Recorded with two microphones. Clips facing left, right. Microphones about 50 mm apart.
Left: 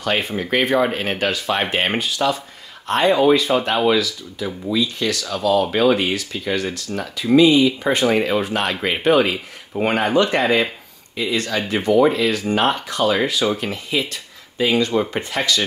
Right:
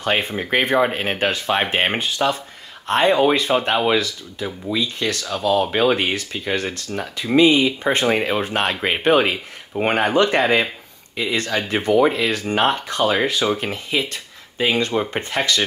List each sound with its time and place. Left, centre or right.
0.0 s speech: right